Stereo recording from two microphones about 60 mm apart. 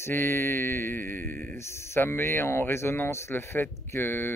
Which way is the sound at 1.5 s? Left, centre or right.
Left.